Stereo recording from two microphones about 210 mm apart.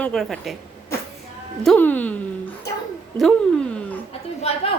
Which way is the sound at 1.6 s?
5° left (ahead or behind).